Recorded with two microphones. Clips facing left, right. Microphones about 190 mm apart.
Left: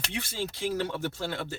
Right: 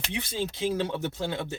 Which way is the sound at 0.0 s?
20° right (ahead or behind).